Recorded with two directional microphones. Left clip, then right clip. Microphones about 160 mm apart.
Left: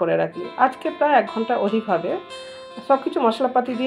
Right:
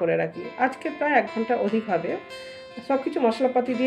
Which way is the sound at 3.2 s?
40° left (ahead or behind).